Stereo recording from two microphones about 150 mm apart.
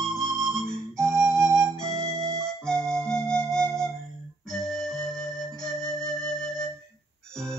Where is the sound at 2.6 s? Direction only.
5° left (ahead or behind).